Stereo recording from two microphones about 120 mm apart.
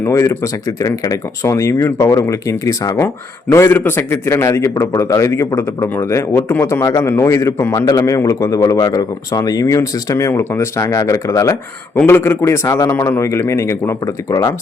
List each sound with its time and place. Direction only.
0.0 s a man's voice: 25° left (ahead or behind)